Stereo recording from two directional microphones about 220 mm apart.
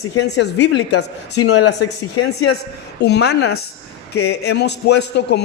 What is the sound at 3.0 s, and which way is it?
A man's voice, 50° left (ahead or behind).